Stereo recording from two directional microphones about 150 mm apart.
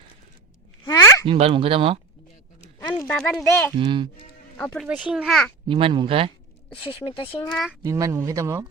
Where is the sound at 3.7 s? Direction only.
35° right (ahead or behind).